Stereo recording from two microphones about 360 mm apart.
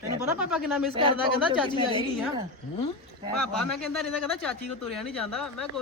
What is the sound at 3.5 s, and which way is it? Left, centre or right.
Speech, centre.